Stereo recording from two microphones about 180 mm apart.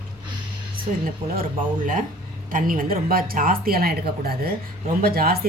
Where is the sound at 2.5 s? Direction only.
50° right (ahead or behind).